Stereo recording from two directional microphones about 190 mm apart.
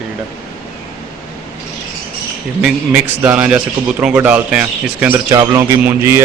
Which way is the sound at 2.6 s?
10° right (ahead or behind).